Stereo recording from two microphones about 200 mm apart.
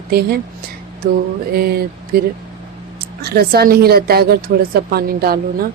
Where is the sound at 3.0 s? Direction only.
50° right (ahead or behind).